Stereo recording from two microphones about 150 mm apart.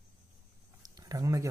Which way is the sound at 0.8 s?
25° right (ahead or behind).